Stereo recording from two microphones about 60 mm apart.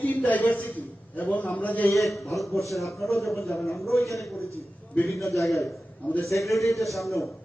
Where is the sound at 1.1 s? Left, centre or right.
Left.